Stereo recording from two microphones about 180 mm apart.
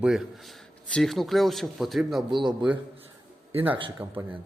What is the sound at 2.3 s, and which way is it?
Speech, 25° right (ahead or behind).